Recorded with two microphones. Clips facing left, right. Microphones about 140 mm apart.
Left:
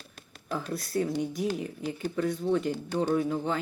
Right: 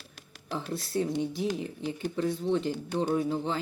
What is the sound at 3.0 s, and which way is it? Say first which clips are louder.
Speech: left 1 dB; 15° right (ahead or behind).